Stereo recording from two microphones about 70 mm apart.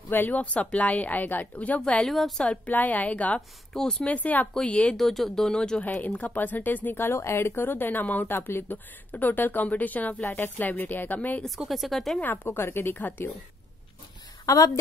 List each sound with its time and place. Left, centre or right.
0.1 s speech: left
2.0 s speech: centre
2.4 s speech: centre
3.7 s speech: centre
4.1 s speech: left
4.9 s speech: centre; by 11.4 s left
11.7 s speech: centre
12.2 s speech: left
14.4 s a woman's voice: left